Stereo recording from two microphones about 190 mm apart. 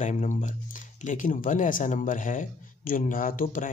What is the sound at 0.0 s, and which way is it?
Speech, 40° left (ahead or behind).